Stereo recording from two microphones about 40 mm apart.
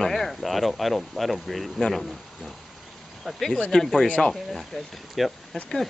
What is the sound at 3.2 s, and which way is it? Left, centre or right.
Speech, centre.